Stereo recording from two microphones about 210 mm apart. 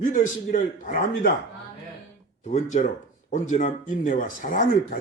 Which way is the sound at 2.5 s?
35° left (ahead or behind).